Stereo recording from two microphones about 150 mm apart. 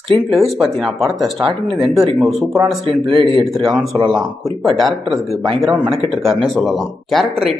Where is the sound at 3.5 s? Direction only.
Centre (ahead or behind).